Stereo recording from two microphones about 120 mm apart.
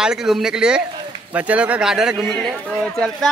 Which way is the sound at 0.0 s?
5° right (ahead or behind).